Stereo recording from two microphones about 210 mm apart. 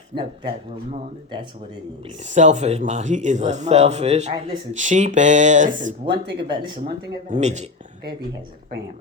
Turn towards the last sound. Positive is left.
turn(degrees=-35)  # may be behind; listen again after turning